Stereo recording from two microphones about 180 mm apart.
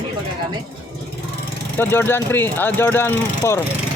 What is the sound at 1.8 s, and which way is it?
Speech, 10° left (ahead or behind).